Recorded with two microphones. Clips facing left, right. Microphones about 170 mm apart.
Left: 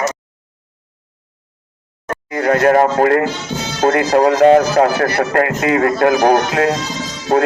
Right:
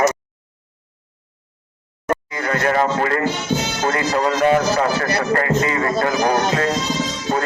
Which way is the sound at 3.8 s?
55° left (ahead or behind).